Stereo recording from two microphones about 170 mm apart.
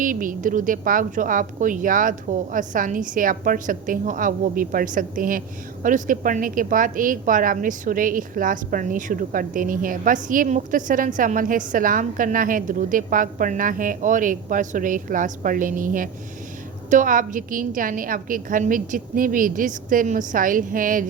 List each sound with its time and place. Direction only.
0.0 s a woman's voice: 50° right (ahead or behind)